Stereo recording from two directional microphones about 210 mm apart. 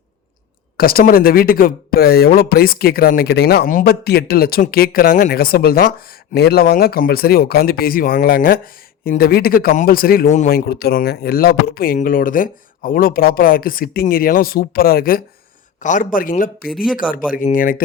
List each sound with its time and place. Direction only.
0.8 s a man's voice: 45° left (ahead or behind)